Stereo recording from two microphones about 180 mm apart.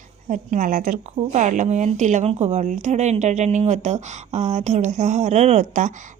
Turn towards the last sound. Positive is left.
turn(degrees=-40)  # may be behind; listen again after turning